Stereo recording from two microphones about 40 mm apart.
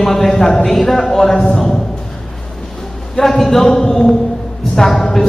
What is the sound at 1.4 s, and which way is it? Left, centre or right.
Speech, left.